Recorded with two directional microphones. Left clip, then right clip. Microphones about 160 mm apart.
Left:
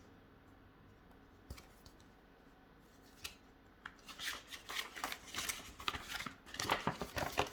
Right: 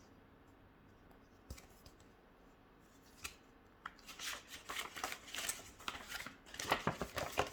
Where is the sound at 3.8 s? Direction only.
Centre (ahead or behind).